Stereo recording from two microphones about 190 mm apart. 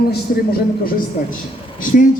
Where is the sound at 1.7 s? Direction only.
45° left (ahead or behind).